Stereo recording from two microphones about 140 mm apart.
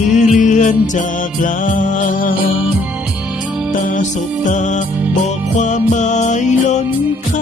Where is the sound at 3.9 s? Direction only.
65° left (ahead or behind).